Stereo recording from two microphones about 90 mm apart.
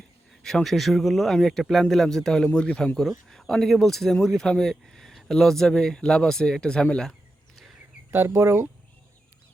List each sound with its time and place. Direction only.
0.4 s speech: 5° left (ahead or behind)
8.4 s speech: 30° right (ahead or behind)